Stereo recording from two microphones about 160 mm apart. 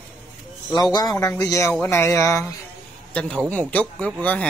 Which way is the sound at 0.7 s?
25° left (ahead or behind).